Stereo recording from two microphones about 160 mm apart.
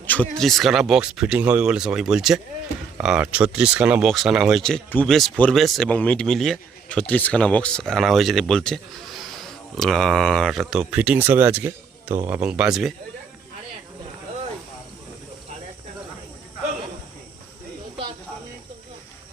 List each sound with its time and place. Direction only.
0.0 s speech: 10° left (ahead or behind)